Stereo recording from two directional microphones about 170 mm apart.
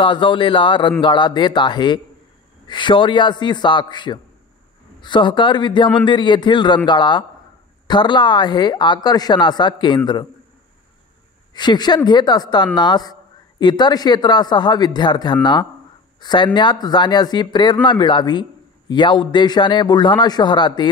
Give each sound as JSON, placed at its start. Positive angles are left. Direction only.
{"t": 0.0, "sound": "a man's voice", "side_deg": 30}
{"t": 11.5, "sound": "a man's voice", "side_deg": 25}